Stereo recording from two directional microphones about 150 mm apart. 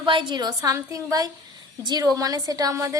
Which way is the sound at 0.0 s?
35° right (ahead or behind).